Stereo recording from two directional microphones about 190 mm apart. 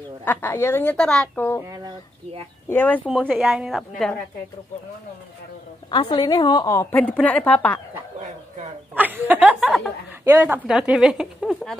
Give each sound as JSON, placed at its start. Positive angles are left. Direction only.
{"t": 0.2, "sound": "a woman's voice", "side_deg": 10}
{"t": 1.7, "sound": "speech", "side_deg": -20}
{"t": 2.7, "sound": "a woman's voice", "side_deg": 10}
{"t": 3.1, "sound": "a woman's voice", "side_deg": -5}
{"t": 5.9, "sound": "a woman's voice", "side_deg": 25}
{"t": 8.9, "sound": "a woman's voice", "side_deg": -10}